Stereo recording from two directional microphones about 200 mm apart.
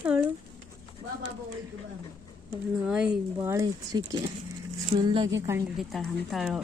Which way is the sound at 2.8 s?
5° right (ahead or behind).